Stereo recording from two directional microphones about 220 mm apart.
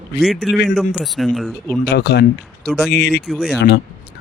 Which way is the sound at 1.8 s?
50° left (ahead or behind).